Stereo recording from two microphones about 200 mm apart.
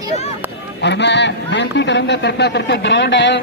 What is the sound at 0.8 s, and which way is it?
A man's voice, 60° left (ahead or behind).